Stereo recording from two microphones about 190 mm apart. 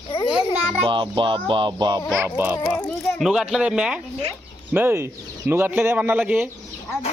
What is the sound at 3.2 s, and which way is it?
A man's voice, centre (ahead or behind).